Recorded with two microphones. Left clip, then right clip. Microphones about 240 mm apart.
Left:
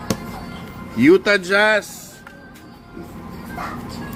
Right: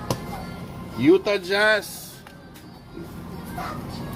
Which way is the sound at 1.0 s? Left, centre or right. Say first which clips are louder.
Left 5 dB; left.